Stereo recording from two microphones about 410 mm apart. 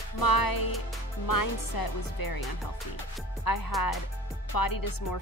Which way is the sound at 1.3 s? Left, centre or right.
Left.